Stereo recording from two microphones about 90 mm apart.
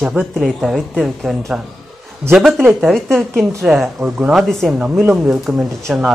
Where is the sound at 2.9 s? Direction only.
5° left (ahead or behind).